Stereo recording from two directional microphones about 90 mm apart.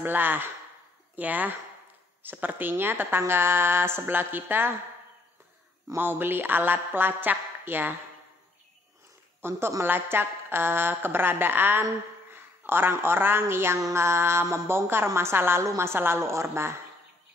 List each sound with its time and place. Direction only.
0.0 s a woman's voice: 20° right (ahead or behind)
5.9 s a woman's voice: 25° right (ahead or behind)
9.4 s a woman's voice: 30° right (ahead or behind)